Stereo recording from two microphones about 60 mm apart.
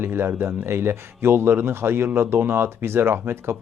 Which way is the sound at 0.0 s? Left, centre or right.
Right.